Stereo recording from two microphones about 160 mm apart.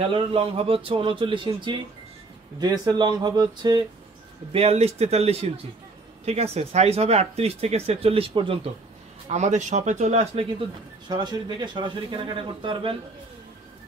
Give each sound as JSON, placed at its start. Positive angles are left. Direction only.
{"t": 0.1, "sound": "speech", "side_deg": -35}
{"t": 4.5, "sound": "speech", "side_deg": -40}
{"t": 9.3, "sound": "speech", "side_deg": -45}
{"t": 11.1, "sound": "speech", "side_deg": -25}